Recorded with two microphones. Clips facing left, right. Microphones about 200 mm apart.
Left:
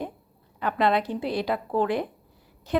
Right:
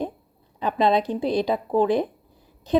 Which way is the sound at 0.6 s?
15° right (ahead or behind).